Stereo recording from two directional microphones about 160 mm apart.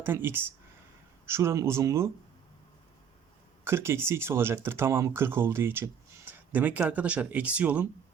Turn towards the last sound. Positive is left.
turn(degrees=-10)  # may be behind; listen again after turning